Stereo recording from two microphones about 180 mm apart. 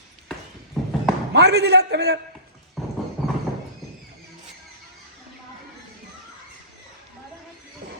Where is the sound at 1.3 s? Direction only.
65° right (ahead or behind).